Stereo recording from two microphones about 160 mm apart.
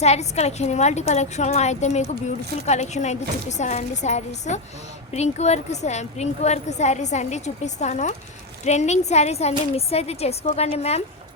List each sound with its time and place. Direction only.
0.0 s a woman's voice: 40° left (ahead or behind)